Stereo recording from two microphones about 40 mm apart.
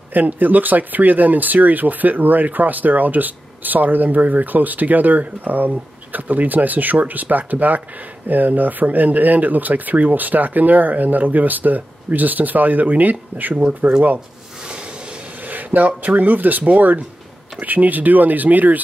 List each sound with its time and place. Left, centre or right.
0.1 s speech: right
15.4 s speech: right